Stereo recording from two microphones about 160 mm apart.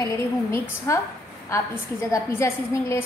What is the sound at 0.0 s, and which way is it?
A woman's voice, 20° left (ahead or behind).